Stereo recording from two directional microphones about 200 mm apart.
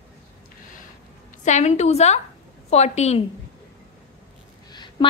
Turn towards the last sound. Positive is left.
turn(degrees=20)  # may be behind; listen again after turning